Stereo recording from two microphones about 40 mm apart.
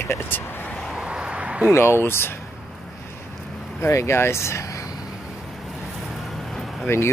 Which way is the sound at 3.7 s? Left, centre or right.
Left.